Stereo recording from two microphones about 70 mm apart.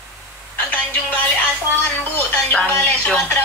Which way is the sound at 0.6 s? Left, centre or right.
Left.